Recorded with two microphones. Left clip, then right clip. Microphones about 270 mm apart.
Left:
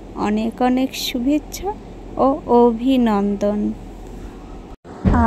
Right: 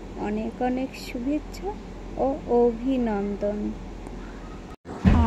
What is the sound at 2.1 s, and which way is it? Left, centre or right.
Speech, left.